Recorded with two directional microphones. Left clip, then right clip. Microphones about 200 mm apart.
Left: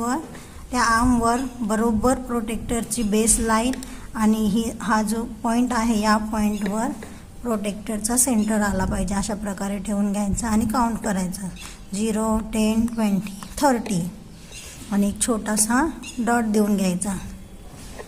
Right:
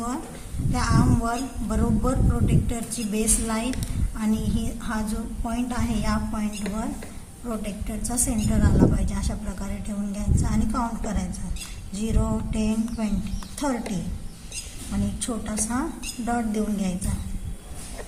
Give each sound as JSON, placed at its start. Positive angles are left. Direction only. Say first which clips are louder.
{"t": 0.7, "sound": "a woman's voice", "louder": "left 6 dB", "side_deg": 40}
{"t": 15.2, "sound": "a woman's voice", "louder": "left 7 dB", "side_deg": 40}